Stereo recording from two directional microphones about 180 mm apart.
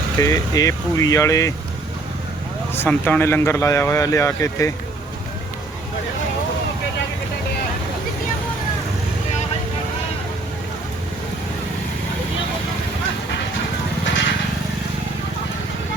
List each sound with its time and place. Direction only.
0.2 s speech: 20° left (ahead or behind)
2.7 s speech: 10° left (ahead or behind)